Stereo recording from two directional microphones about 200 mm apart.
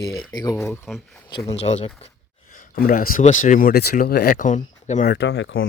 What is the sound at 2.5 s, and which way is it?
Speech, 45° left (ahead or behind).